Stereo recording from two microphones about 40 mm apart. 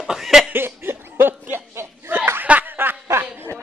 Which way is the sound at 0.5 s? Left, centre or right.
Right.